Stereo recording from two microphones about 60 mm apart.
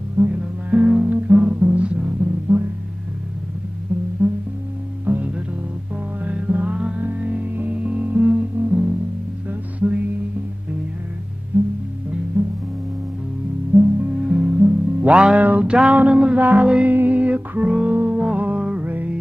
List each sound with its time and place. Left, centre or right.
0.2 s music: centre
1.0 s music: right
1.3 s music: centre
3.9 s music: right
11.5 s music: right
13.7 s music: centre
18.9 s music: right